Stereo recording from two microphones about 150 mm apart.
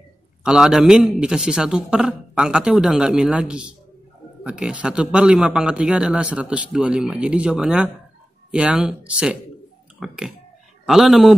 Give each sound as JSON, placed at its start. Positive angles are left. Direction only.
{"t": 0.4, "sound": "a man's voice", "side_deg": -5}